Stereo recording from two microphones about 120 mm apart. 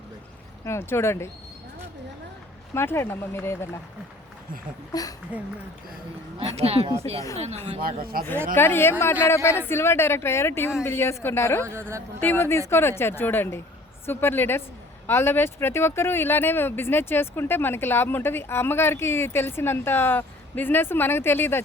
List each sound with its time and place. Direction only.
0.6 s speech: 20° left (ahead or behind)
2.7 s speech: 20° left (ahead or behind)
4.9 s a woman's voice: 30° left (ahead or behind)
6.6 s a woman's voice: 60° right (ahead or behind)
8.5 s speech: 20° left (ahead or behind)
11.6 s speech: 20° right (ahead or behind)
12.2 s a woman's voice: 20° left (ahead or behind)